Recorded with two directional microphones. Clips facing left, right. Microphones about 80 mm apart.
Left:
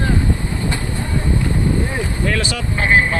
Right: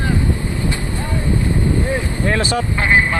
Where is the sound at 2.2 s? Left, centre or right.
Right.